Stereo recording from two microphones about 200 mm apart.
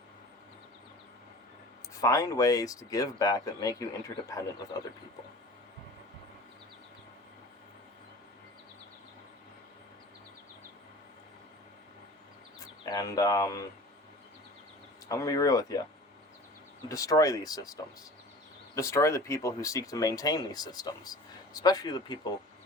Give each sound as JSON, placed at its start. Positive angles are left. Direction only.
{"t": 2.0, "sound": "speech", "side_deg": 15}
{"t": 12.8, "sound": "speech", "side_deg": 20}
{"t": 15.1, "sound": "speech", "side_deg": 15}
{"t": 16.9, "sound": "speech", "side_deg": 15}